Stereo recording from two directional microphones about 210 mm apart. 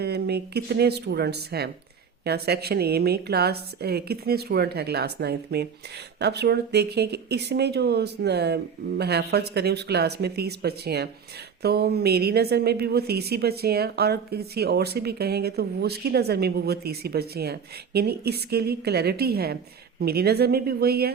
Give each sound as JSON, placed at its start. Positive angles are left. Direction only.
{"t": 0.0, "sound": "a woman's voice", "side_deg": -50}